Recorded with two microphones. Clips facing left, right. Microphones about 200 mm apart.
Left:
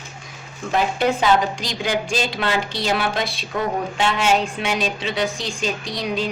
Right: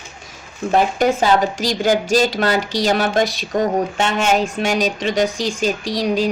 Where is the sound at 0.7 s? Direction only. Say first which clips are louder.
Right 4 dB; 45° right (ahead or behind).